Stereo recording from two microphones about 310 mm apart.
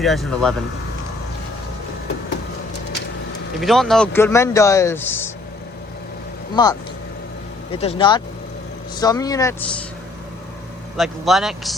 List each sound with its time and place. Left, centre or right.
0.0 s a man's voice: centre
3.6 s speech: centre
6.6 s speech: centre
10.9 s a man's voice: centre